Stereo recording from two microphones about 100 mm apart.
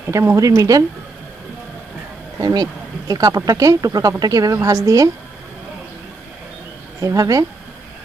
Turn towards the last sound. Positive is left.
turn(degrees=-35)  # may be behind; listen again after turning